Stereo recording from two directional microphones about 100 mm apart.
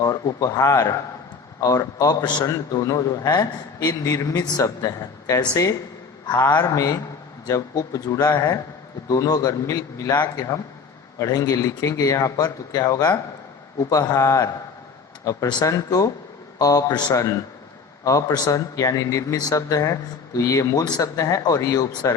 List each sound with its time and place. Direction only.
0.0 s a man's voice: 35° left (ahead or behind)